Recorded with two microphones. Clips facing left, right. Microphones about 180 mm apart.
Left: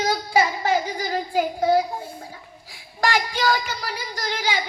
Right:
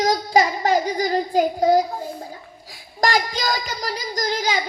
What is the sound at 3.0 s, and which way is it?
Child singing, 40° right (ahead or behind).